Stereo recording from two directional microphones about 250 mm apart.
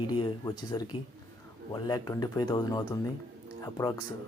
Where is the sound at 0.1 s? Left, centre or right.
Centre.